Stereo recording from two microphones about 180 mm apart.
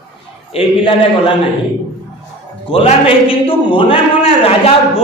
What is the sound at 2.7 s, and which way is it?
A man's voice, 30° left (ahead or behind).